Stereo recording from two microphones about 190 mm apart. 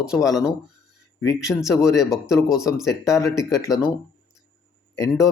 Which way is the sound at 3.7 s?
5° right (ahead or behind).